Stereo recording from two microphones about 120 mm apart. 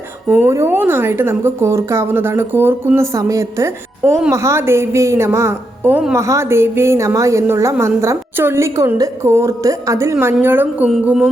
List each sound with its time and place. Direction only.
0.3 s a woman's voice: 20° right (ahead or behind)
6.1 s a woman's voice: 25° right (ahead or behind)